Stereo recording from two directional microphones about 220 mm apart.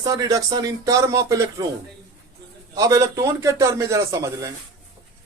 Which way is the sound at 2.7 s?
15° right (ahead or behind).